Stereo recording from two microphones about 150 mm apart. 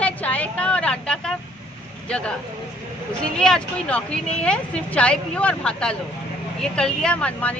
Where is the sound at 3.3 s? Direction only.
5° left (ahead or behind).